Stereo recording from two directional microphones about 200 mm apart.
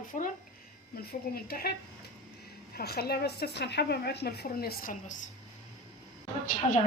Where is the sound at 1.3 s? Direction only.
50° left (ahead or behind).